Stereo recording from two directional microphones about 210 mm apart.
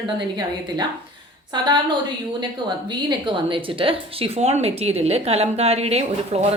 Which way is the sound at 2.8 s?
20° right (ahead or behind).